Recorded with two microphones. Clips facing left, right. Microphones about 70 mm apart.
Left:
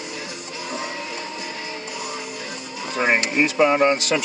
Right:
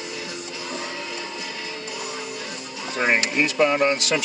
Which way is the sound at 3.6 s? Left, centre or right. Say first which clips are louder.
Left 2 dB; left.